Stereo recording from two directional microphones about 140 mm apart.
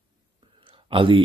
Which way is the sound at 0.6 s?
40° right (ahead or behind).